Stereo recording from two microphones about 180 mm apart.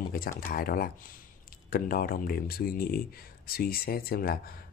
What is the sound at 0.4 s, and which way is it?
Speech, 55° left (ahead or behind).